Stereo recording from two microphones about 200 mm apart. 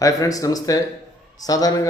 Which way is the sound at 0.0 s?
15° left (ahead or behind).